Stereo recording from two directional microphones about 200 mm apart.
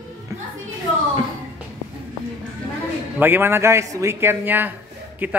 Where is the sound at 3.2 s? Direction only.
10° right (ahead or behind).